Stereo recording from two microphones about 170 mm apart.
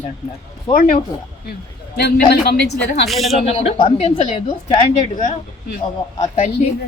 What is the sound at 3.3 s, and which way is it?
A woman's voice, 40° left (ahead or behind).